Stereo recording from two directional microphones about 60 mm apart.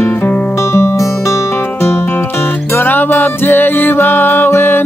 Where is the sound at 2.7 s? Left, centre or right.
Left.